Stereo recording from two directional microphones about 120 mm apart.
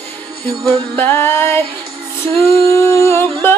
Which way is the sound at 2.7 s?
25° left (ahead or behind).